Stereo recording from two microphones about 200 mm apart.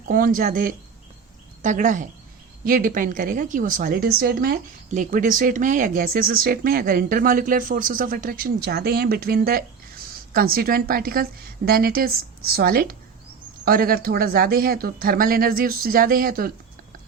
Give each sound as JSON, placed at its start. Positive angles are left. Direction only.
{"t": 0.1, "sound": "a woman's voice", "side_deg": -45}